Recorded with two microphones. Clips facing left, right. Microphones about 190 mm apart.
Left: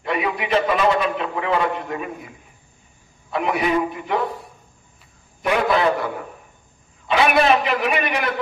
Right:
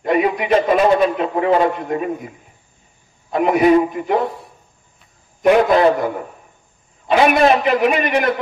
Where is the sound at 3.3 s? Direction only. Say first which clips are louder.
Right 8 dB; 45° right (ahead or behind).